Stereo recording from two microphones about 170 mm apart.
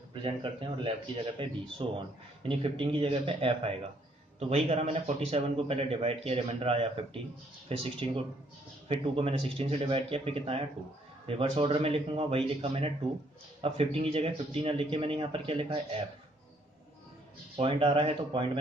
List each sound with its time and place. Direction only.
0.1 s a man's voice: 30° right (ahead or behind)
17.6 s a man's voice: 35° right (ahead or behind)